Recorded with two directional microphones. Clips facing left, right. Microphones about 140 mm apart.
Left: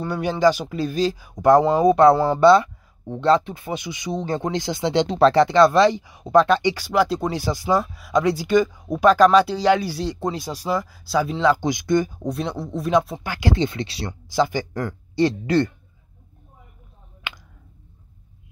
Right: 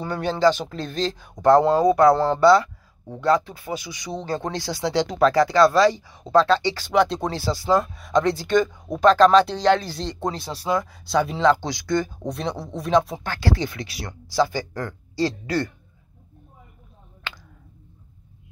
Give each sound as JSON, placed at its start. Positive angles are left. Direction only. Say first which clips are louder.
{"t": 0.0, "sound": "speech", "louder": "left 1 dB", "side_deg": 10}
{"t": 1.8, "sound": "speech", "louder": "left 2 dB", "side_deg": 25}
{"t": 2.1, "sound": "speech", "louder": "left 1 dB", "side_deg": 5}
{"t": 2.4, "sound": "speech", "louder": "left 2 dB", "side_deg": 20}
{"t": 6.9, "sound": "speech", "louder": "right 2 dB", "side_deg": 5}
{"t": 11.6, "sound": "speech", "louder": "left 4 dB", "side_deg": 20}
{"t": 12.3, "sound": "speech", "louder": "left 2 dB", "side_deg": 0}
{"t": 13.3, "sound": "speech", "louder": "left 4 dB", "side_deg": 20}
{"t": 14.3, "sound": "speech", "louder": "left 1 dB", "side_deg": 20}